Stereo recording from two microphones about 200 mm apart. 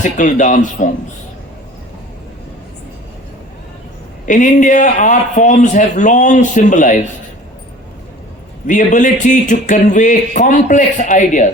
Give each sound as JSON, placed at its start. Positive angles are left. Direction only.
{"t": 0.0, "sound": "speech", "side_deg": 40}
{"t": 4.3, "sound": "speech", "side_deg": 40}
{"t": 8.6, "sound": "speech", "side_deg": 40}